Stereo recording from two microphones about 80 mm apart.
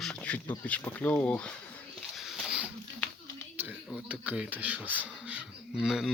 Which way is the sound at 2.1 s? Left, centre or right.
Centre.